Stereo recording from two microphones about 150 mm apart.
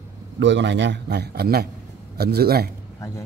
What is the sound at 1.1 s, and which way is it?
A man's voice, 90° right.